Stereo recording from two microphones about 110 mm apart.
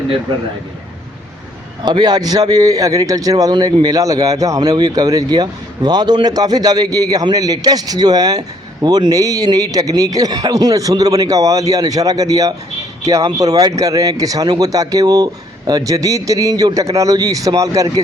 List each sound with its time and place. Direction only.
1.8 s speech: 40° right (ahead or behind)
3.8 s speech: 35° right (ahead or behind)